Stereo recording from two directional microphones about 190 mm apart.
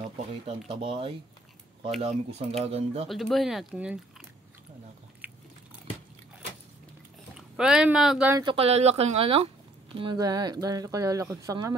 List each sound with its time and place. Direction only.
0.0 s speech: 30° right (ahead or behind)
3.1 s speech: centre (ahead or behind)
5.2 s biting: 10° right (ahead or behind)
7.3 s speech: 5° right (ahead or behind)
8.4 s speech: 30° right (ahead or behind)
9.9 s speech: 20° right (ahead or behind)